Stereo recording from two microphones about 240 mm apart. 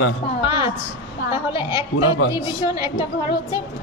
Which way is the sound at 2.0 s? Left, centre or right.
Left.